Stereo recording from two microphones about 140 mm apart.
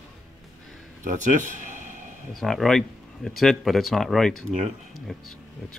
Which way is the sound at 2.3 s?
Centre (ahead or behind).